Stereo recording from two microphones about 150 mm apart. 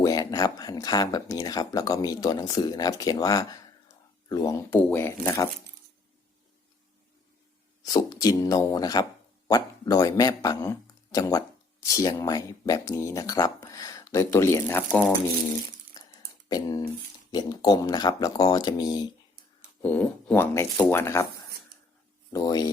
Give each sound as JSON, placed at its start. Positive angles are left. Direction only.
{"t": 0.0, "sound": "speech", "side_deg": 25}
{"t": 4.7, "sound": "speech", "side_deg": 10}
{"t": 7.9, "sound": "speech", "side_deg": 25}
{"t": 16.0, "sound": "a sound", "side_deg": 25}
{"t": 16.5, "sound": "speech", "side_deg": 25}
{"t": 19.8, "sound": "speech", "side_deg": 10}
{"t": 22.3, "sound": "speech", "side_deg": 25}